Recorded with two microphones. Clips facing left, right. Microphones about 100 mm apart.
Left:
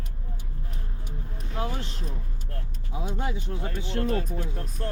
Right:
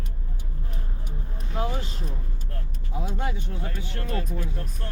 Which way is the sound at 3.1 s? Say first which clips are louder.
Even; 15° left (ahead or behind).